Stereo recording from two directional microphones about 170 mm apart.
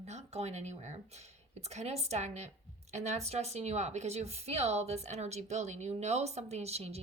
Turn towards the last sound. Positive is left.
turn(degrees=-35)  # may be behind; listen again after turning